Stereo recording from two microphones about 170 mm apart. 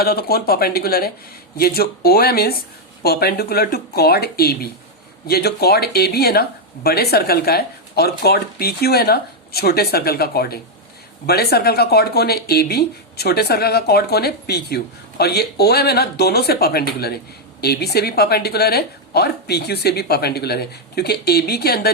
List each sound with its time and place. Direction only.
0.0 s speech: 65° left (ahead or behind)